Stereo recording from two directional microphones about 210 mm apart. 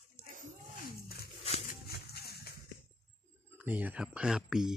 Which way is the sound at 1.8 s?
50° left (ahead or behind).